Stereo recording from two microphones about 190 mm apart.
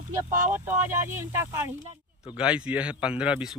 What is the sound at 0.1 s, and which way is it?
Speech, 15° right (ahead or behind).